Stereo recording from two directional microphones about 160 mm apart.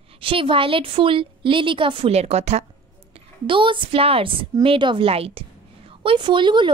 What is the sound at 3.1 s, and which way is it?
A woman's voice, 30° right (ahead or behind).